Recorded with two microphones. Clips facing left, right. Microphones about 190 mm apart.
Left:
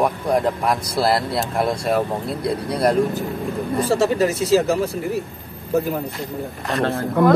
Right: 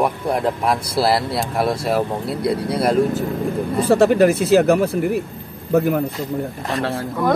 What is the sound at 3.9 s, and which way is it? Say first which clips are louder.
Speech: right 6 dB; 60° right (ahead or behind).